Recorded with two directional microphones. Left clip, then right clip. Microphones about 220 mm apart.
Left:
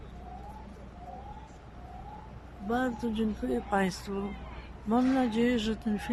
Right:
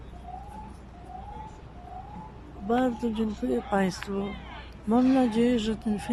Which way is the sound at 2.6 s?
5° right (ahead or behind).